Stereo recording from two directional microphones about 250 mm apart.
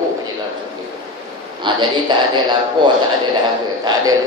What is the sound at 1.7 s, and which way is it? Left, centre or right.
Speech, centre.